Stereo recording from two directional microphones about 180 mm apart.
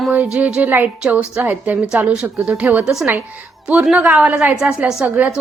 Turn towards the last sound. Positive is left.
turn(degrees=-10)  # may be behind; listen again after turning